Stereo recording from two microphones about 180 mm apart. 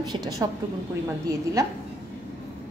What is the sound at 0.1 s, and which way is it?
Speech, 20° right (ahead or behind).